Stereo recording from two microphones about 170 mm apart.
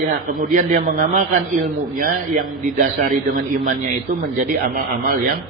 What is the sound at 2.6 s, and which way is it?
A man's voice, 50° right (ahead or behind).